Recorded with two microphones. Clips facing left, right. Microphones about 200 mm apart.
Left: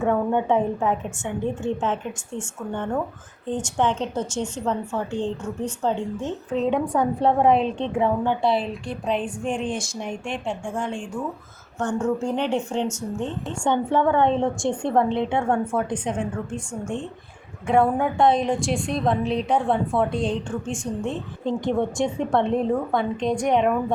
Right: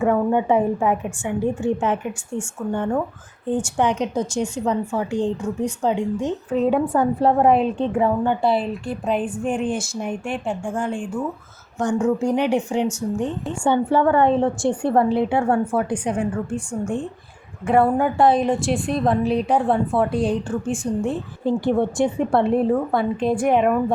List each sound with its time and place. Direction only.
0.0 s a woman's voice: 5° right (ahead or behind)
17.7 s a woman's voice: 5° right (ahead or behind)